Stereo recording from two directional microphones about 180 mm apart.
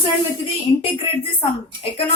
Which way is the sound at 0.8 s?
30° left (ahead or behind).